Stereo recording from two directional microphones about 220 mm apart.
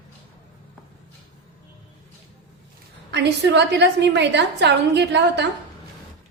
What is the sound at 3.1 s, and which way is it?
A woman's voice, 50° right (ahead or behind).